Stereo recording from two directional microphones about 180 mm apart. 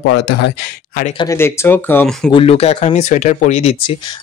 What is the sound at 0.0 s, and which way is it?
Speech, 90° left.